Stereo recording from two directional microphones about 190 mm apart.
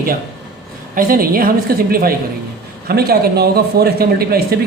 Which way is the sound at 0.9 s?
50° right (ahead or behind).